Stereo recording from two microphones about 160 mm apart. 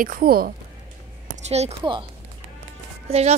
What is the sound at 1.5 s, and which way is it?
Speech, 40° right (ahead or behind).